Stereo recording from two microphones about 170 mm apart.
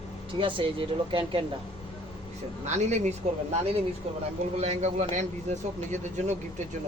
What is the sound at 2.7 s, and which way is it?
Speech, 40° right (ahead or behind).